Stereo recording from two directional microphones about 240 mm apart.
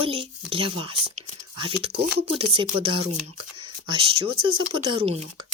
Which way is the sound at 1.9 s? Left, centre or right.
Right.